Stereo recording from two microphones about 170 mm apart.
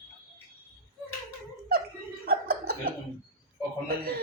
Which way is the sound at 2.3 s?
60° right (ahead or behind).